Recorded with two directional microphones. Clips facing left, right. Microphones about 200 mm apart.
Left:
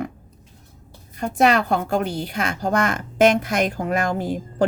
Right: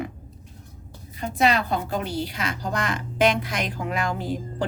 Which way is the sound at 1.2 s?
50° left (ahead or behind).